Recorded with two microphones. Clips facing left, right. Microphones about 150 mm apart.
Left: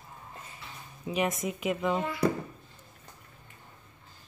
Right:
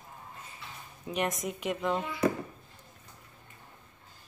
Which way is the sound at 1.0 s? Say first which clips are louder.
Left 2 dB; 5° left (ahead or behind).